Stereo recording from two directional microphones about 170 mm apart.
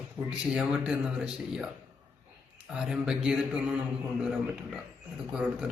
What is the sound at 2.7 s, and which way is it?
Speech, 5° right (ahead or behind).